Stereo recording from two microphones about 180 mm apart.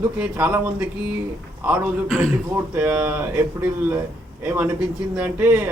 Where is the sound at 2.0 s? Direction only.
5° left (ahead or behind).